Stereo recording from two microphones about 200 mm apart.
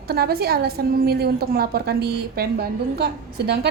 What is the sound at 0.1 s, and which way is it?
A woman's voice, 50° right (ahead or behind).